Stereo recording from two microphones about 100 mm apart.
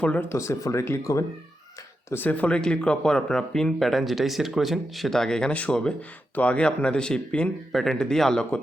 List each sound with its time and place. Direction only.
0.0 s speech: 15° left (ahead or behind)
0.3 s speech: 30° left (ahead or behind)
2.1 s speech: 15° left (ahead or behind)